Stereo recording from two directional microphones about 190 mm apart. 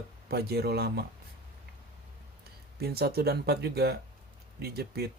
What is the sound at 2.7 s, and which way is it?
Speech, 55° right (ahead or behind).